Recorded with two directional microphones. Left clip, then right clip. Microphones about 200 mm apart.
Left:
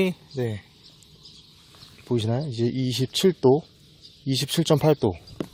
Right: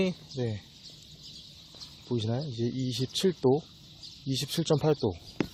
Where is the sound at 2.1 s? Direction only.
45° left (ahead or behind).